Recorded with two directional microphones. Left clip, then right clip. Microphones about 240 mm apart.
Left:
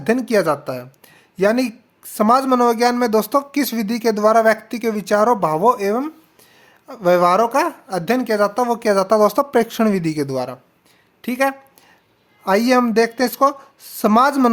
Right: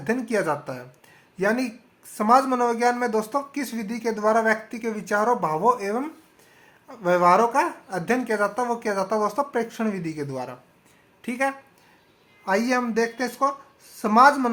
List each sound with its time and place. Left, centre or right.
0.0 s speech: left